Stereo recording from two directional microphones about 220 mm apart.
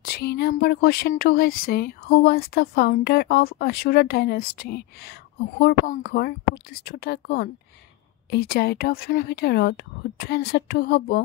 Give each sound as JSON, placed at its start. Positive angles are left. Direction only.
{"t": 0.0, "sound": "speech", "side_deg": 45}